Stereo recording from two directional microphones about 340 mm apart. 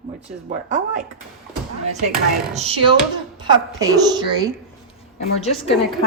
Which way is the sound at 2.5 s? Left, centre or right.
Centre.